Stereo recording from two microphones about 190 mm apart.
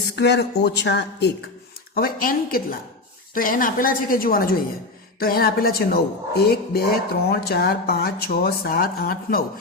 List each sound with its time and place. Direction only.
0.2 s speech: 60° left (ahead or behind)
2.0 s speech: 50° left (ahead or behind)